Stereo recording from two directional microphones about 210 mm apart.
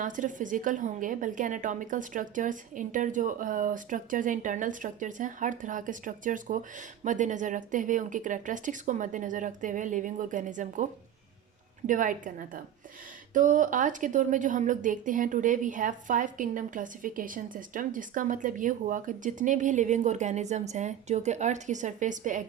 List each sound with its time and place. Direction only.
0.0 s a woman's voice: 40° right (ahead or behind)
11.9 s a woman's voice: 40° right (ahead or behind)